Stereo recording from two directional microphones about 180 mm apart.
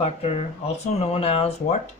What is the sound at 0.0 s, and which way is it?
Speech, 35° left (ahead or behind).